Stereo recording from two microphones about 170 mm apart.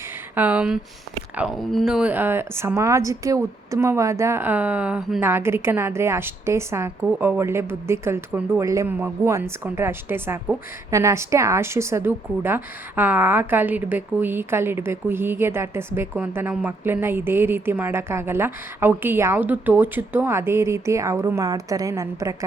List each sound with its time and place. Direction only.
0.3 s a woman's voice: 10° right (ahead or behind)